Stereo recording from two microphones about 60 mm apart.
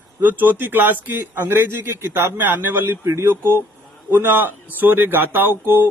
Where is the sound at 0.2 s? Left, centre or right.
Right.